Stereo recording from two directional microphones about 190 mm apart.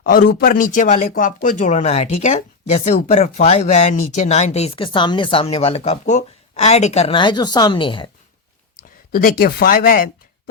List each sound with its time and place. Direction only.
0.0 s speech: 50° left (ahead or behind); by 8.1 s 25° left (ahead or behind)
9.1 s speech: 50° left (ahead or behind)